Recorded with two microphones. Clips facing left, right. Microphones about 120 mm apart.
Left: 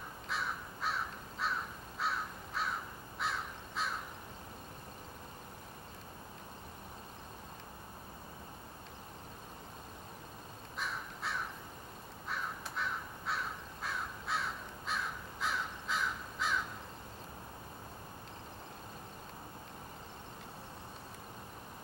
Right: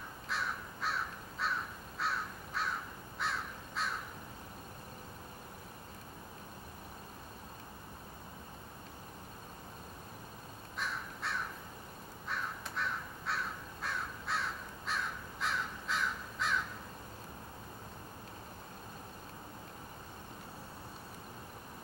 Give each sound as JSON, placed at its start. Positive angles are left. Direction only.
{"t": 0.3, "sound": "crow", "side_deg": 0}
{"t": 10.8, "sound": "crow", "side_deg": 0}